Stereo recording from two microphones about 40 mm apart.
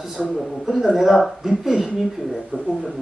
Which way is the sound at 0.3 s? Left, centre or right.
Centre.